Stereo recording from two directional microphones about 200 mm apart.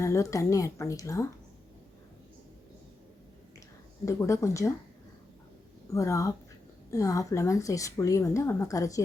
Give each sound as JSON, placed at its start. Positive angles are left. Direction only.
{"t": 0.0, "sound": "speech", "side_deg": 15}
{"t": 4.0, "sound": "speech", "side_deg": 15}
{"t": 5.9, "sound": "speech", "side_deg": 15}